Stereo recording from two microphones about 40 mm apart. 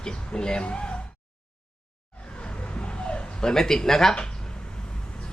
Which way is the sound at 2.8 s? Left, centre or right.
Left.